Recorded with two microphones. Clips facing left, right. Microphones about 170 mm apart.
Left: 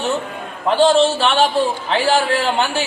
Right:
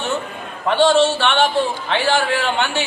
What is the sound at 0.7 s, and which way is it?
A man's voice, 35° left (ahead or behind).